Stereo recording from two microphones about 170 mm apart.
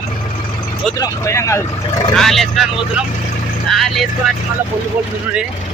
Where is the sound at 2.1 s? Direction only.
Centre (ahead or behind).